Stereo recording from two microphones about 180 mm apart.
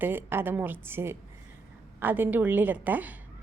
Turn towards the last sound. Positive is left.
turn(degrees=-10)  # may be behind; listen again after turning